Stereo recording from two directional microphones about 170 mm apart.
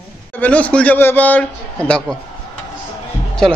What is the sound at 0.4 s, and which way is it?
A man's voice, 10° left (ahead or behind).